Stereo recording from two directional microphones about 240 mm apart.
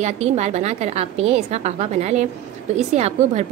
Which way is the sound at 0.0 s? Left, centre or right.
Right.